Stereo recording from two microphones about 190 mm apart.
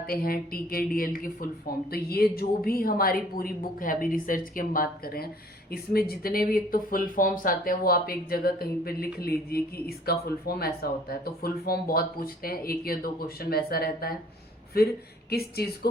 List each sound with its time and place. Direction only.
0.1 s speech: 50° left (ahead or behind)
15.3 s speech: 55° left (ahead or behind)